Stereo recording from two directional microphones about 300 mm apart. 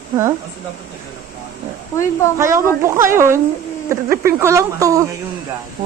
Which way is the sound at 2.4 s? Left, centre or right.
Centre.